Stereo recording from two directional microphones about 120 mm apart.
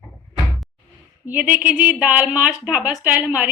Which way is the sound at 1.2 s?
15° right (ahead or behind).